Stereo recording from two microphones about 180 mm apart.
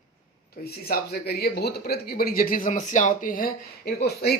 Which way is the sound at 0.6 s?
60° left (ahead or behind).